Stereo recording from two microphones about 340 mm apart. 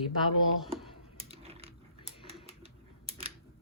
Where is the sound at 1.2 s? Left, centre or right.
Centre.